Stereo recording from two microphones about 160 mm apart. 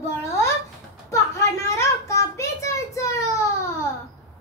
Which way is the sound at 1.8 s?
20° left (ahead or behind).